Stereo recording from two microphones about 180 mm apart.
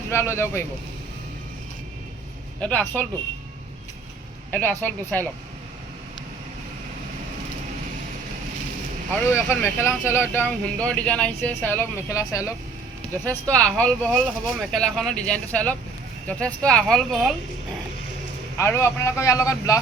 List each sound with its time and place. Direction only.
0.1 s speech: 15° left (ahead or behind)
2.6 s speech: 10° left (ahead or behind)
4.5 s speech: 10° left (ahead or behind)
9.3 s speech: 15° left (ahead or behind)
18.5 s speech: 15° left (ahead or behind)